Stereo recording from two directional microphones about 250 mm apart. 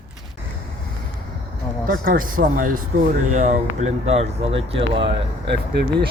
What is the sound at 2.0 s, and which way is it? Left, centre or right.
Speech, right.